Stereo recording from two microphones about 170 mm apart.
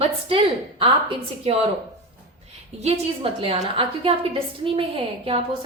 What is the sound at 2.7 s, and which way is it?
A woman's voice, 40° right (ahead or behind).